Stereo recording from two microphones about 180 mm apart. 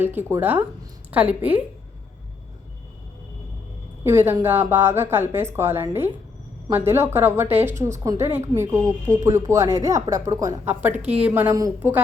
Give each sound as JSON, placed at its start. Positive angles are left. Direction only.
{"t": 0.0, "sound": "a woman's voice", "side_deg": -10}
{"t": 4.0, "sound": "a woman's voice", "side_deg": -15}
{"t": 10.9, "sound": "a woman's voice", "side_deg": -35}
{"t": 11.2, "sound": "a woman's voice", "side_deg": -10}